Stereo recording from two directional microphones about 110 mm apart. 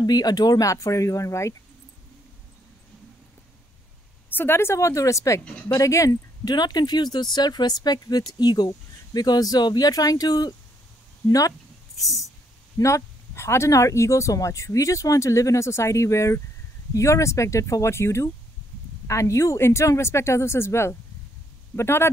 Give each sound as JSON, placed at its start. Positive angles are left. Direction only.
{"t": 0.0, "sound": "speech", "side_deg": 35}
{"t": 4.3, "sound": "speech", "side_deg": 20}
{"t": 12.7, "sound": "speech", "side_deg": 30}